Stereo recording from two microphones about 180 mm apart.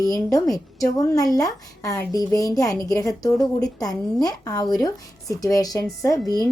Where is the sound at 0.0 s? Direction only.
20° left (ahead or behind).